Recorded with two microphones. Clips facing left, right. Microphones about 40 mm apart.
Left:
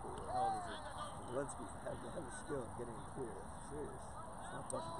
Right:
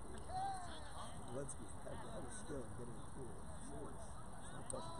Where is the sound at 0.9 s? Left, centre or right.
Left.